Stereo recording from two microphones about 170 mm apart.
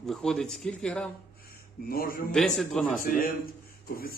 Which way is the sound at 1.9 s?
60° left (ahead or behind).